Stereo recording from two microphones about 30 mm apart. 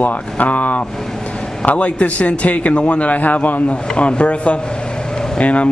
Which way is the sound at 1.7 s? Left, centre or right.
Left.